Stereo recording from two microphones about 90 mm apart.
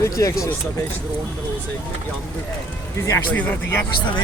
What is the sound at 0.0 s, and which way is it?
Speech, 40° left (ahead or behind).